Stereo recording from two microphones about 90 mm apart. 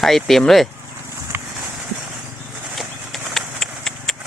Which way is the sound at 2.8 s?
Centre (ahead or behind).